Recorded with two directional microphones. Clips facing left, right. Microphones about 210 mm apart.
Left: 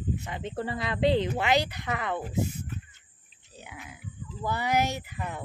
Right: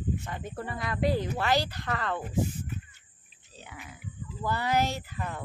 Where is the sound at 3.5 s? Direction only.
15° left (ahead or behind).